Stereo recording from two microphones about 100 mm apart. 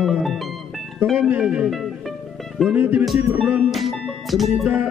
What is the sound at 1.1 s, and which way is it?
Speech, 15° right (ahead or behind).